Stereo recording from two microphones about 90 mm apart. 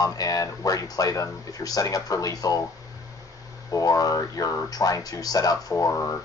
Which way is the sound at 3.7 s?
40° left (ahead or behind).